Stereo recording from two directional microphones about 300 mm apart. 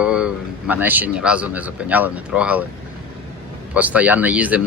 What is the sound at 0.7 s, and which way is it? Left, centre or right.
Speech, centre.